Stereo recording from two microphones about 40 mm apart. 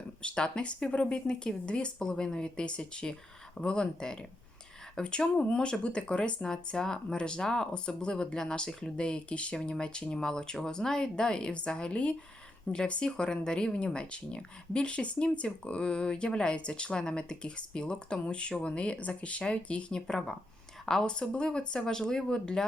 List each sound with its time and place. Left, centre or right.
0.2 s speech: left
20.1 s speech: centre